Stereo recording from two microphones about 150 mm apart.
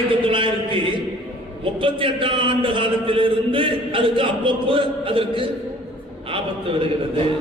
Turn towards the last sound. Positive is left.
turn(degrees=-35)  # may be behind; listen again after turning